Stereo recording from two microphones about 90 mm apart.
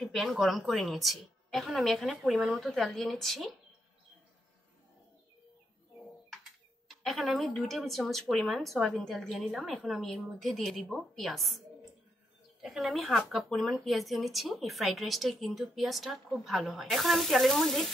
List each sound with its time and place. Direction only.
0.0 s a woman's voice: centre (ahead or behind)
2.3 s speech: 15° right (ahead or behind)
2.6 s speech: centre (ahead or behind)
7.0 s speech: centre (ahead or behind)
12.6 s speech: centre (ahead or behind)